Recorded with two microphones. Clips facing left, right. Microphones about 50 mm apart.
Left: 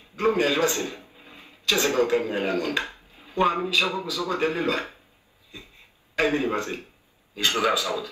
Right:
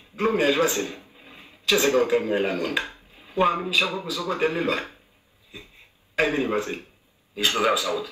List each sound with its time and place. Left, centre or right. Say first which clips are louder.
0.1 s a man's voice: right 1 dB; right
6.1 s a man's voice: right 1 dB; right